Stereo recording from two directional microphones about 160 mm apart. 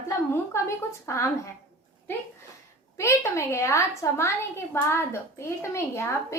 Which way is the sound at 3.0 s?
20° left (ahead or behind).